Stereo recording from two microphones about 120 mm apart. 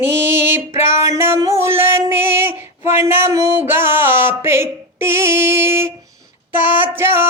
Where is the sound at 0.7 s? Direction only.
20° right (ahead or behind).